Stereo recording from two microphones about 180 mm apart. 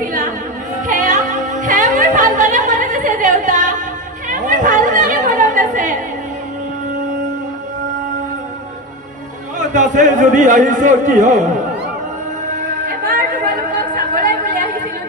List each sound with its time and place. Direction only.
0.0 s singing: 45° right (ahead or behind)
0.8 s music: 45° right (ahead or behind)
4.3 s chatter: 45° right (ahead or behind)
9.6 s a man's voice: 45° right (ahead or behind)
12.8 s a sound: 50° right (ahead or behind)